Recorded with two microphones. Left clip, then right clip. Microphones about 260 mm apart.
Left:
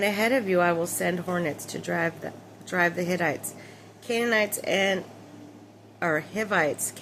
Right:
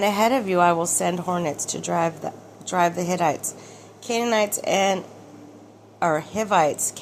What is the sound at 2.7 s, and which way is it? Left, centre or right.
A woman's voice, centre.